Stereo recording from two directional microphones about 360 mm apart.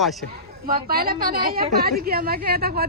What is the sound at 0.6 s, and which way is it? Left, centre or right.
A woman's voice, right.